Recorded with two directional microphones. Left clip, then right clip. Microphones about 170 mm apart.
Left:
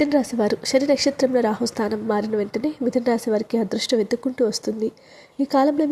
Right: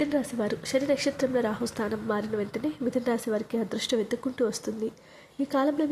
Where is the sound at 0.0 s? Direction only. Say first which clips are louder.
Left 8 dB; 30° left (ahead or behind).